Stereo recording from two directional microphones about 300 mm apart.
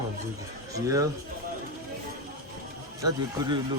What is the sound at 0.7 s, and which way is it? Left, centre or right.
Speech, centre.